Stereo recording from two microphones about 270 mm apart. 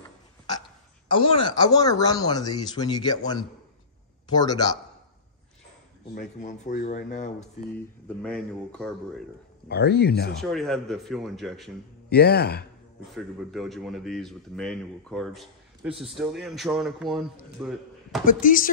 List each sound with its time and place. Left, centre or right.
1.0 s speech: centre
6.1 s speech: left
8.2 s speech: centre
9.7 s speech: left
10.4 s speech: centre
12.1 s speech: left
13.0 s speech: centre
18.2 s speech: left